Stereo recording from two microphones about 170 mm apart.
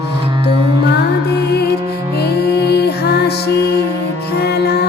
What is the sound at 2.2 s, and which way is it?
Music, 70° left (ahead or behind).